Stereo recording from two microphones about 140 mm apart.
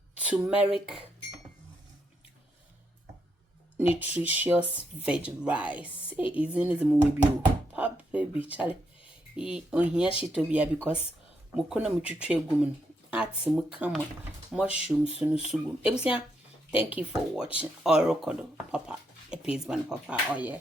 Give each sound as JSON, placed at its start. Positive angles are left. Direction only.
{"t": 0.1, "sound": "speech", "side_deg": -10}
{"t": 3.8, "sound": "speech", "side_deg": -10}
{"t": 4.6, "sound": "speech", "side_deg": 40}
{"t": 5.0, "sound": "speech", "side_deg": -10}
{"t": 7.7, "sound": "a sound", "side_deg": -10}
{"t": 8.4, "sound": "speech", "side_deg": -10}